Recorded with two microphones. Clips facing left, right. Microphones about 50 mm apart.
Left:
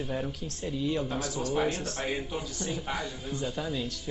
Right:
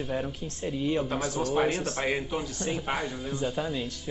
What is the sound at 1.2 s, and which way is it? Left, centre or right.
Speech, right.